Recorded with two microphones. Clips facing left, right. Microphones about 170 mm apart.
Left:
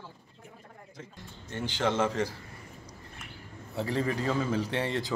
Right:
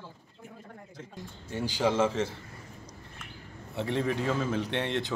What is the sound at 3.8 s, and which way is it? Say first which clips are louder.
A man's voice: right 1 dB; centre (ahead or behind).